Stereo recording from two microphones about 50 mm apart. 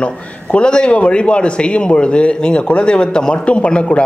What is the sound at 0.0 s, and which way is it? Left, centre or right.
A man's voice, left.